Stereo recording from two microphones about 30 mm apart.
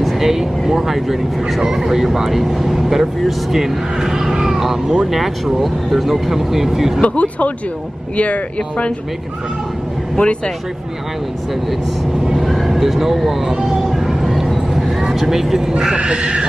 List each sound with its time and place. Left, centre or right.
0.2 s speech: centre
7.0 s speech: left
10.1 s speech: left
12.4 s speech: centre
13.8 s a sound: centre
16.0 s wild animals: right